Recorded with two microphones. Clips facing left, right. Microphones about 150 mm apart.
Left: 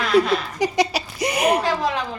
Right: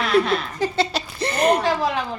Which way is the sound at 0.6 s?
15° left (ahead or behind).